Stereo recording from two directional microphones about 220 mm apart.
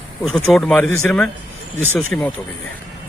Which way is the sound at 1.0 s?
5° left (ahead or behind).